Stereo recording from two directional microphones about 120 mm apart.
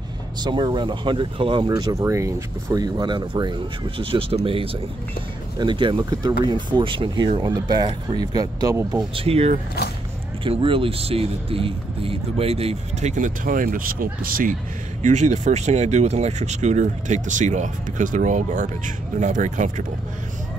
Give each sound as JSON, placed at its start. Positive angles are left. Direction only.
{"t": 0.4, "sound": "speech", "side_deg": -40}
{"t": 4.0, "sound": "speech", "side_deg": -50}
{"t": 7.4, "sound": "speech", "side_deg": -35}
{"t": 9.1, "sound": "speech", "side_deg": -55}
{"t": 13.1, "sound": "speech", "side_deg": -90}
{"t": 14.5, "sound": "speech", "side_deg": -85}